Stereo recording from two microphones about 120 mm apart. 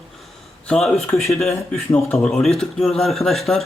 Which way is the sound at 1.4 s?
60° left (ahead or behind).